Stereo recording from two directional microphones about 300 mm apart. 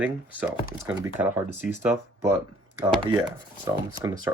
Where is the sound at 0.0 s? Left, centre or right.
Centre.